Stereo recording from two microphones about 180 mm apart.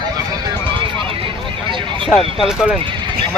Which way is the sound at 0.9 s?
30° right (ahead or behind).